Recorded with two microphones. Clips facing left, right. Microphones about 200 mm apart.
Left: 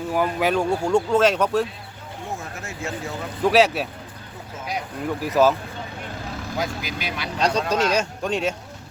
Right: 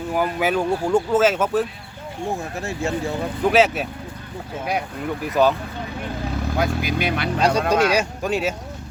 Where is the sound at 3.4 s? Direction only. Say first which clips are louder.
Even; centre (ahead or behind).